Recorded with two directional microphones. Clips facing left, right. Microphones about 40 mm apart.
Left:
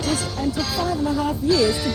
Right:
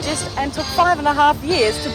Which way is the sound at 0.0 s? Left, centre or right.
Right.